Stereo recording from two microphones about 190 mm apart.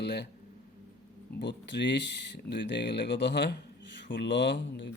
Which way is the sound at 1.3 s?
65° left (ahead or behind).